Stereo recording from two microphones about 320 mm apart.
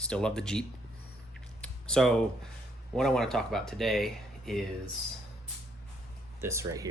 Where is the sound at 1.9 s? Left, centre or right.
Centre.